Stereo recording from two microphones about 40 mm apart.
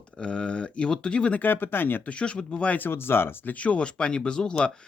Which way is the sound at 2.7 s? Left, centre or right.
Left.